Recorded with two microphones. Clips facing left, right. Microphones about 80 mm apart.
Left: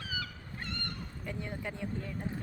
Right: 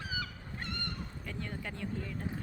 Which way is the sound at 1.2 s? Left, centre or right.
Centre.